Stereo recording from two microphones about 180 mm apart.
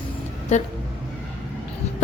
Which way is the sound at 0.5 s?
40° left (ahead or behind).